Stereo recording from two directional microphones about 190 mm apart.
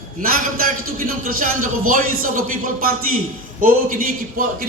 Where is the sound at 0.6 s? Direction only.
45° right (ahead or behind).